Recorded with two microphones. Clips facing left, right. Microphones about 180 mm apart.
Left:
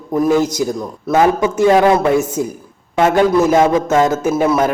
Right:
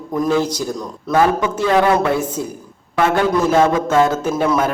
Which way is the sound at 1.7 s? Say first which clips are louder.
Left 3 dB; 20° left (ahead or behind).